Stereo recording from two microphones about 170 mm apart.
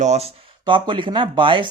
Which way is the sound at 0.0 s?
40° right (ahead or behind).